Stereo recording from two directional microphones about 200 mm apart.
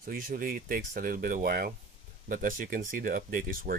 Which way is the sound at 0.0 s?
45° right (ahead or behind).